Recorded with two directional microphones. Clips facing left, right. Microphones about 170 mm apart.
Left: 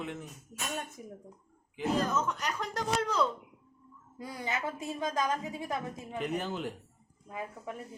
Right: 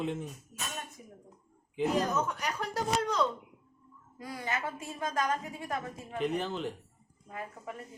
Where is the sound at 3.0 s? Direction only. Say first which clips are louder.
Left 1 dB; centre (ahead or behind).